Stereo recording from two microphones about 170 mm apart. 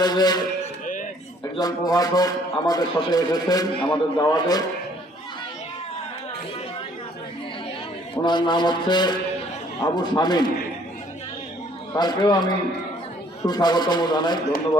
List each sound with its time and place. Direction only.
0.0 s a man's voice: 25° left (ahead or behind)
1.5 s a man's voice: 20° left (ahead or behind)
8.1 s a man's voice: 25° left (ahead or behind)
11.9 s a man's voice: 25° left (ahead or behind)
13.4 s a man's voice: 25° left (ahead or behind)